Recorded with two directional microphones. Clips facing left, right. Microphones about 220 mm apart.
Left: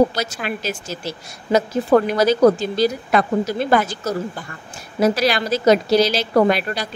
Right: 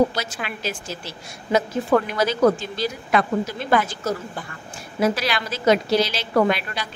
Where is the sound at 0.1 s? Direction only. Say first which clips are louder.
Left 5 dB; 40° left (ahead or behind).